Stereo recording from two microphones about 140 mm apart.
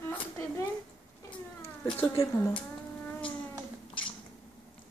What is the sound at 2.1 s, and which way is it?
Speech, 20° left (ahead or behind).